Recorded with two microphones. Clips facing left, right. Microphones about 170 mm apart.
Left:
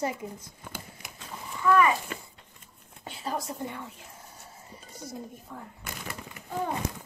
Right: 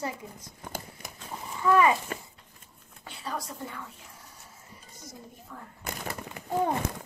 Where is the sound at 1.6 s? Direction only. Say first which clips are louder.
Even; 25° right (ahead or behind).